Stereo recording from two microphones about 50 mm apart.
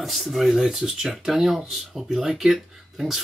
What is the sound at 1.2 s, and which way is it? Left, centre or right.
Speech, centre.